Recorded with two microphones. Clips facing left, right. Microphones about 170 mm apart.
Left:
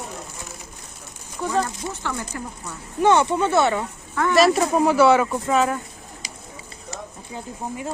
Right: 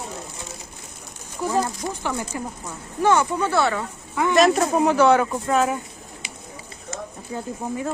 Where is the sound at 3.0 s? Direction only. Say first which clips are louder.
Left 2 dB; 25° left (ahead or behind).